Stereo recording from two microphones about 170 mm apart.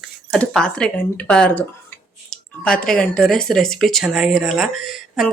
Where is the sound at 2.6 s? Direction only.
5° left (ahead or behind).